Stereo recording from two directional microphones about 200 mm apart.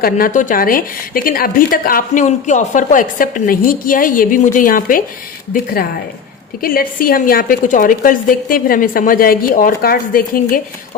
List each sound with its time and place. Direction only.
0.0 s a woman's voice: 40° left (ahead or behind)
6.6 s a woman's voice: 45° left (ahead or behind)